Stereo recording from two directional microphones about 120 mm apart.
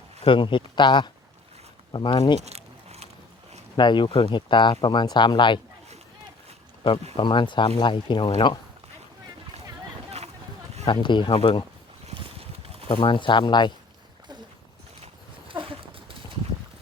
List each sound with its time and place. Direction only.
0.3 s speech: 45° left (ahead or behind)
2.4 s a sound: 60° right (ahead or behind)
3.8 s speech: 40° left (ahead or behind)
7.2 s speech: 40° left (ahead or behind)
10.8 s speech: 40° left (ahead or behind)
12.1 s a sound: 50° right (ahead or behind)
12.9 s speech: 45° left (ahead or behind)
15.0 s horse: 50° right (ahead or behind)